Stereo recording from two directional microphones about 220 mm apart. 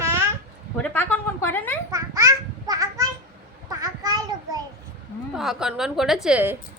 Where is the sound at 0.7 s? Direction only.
5° left (ahead or behind).